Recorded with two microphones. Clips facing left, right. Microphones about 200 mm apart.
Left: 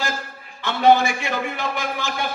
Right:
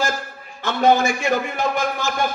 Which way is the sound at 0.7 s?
45° right (ahead or behind).